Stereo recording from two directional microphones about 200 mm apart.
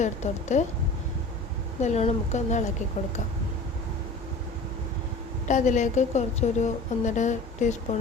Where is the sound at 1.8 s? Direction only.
35° left (ahead or behind).